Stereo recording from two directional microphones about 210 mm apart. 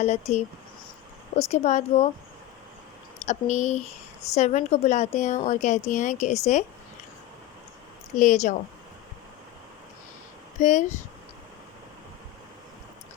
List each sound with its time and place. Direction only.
0.0 s a woman's voice: 30° left (ahead or behind)
3.2 s a woman's voice: 35° left (ahead or behind)
8.2 s a woman's voice: 35° left (ahead or behind)
10.6 s a woman's voice: 35° left (ahead or behind)